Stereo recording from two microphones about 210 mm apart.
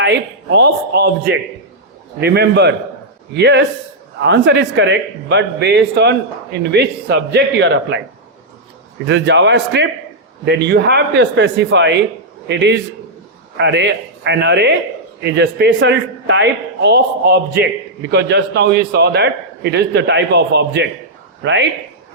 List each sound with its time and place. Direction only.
0.0 s a man's voice: 55° right (ahead or behind)
9.0 s a man's voice: 60° right (ahead or behind)